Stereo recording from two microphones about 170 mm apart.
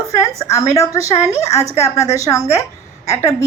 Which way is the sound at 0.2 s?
20° left (ahead or behind).